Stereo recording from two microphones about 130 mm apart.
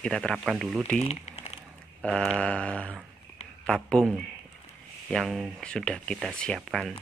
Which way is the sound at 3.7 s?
5° left (ahead or behind).